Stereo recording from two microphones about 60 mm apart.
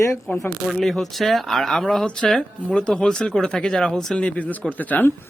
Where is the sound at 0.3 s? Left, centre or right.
Left.